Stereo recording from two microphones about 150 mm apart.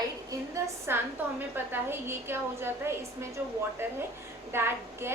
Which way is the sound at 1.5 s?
15° right (ahead or behind).